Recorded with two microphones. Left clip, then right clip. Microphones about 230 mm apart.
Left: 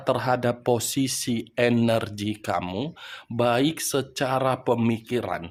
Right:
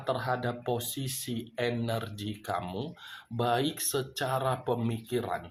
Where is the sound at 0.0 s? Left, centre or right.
Left.